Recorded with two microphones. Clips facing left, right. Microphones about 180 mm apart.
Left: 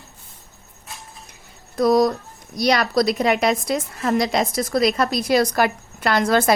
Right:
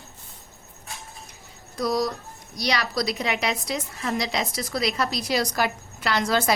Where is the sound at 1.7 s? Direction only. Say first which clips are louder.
Left 8 dB; 50° left (ahead or behind).